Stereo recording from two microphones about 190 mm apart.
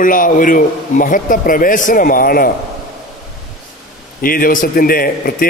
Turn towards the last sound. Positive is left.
turn(degrees=50)  # may be behind; listen again after turning